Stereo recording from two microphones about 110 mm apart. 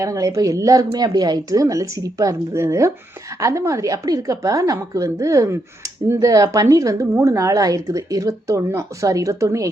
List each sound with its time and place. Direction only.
0.0 s a woman's voice: 30° right (ahead or behind)